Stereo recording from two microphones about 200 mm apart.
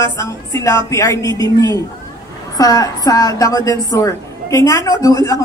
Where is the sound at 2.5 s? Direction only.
20° left (ahead or behind).